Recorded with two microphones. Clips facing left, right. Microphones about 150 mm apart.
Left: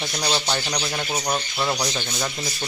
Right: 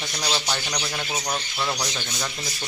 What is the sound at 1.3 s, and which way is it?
Speech, 20° left (ahead or behind).